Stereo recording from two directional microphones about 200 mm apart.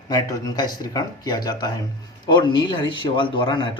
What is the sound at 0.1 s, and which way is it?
A man's voice, 20° left (ahead or behind).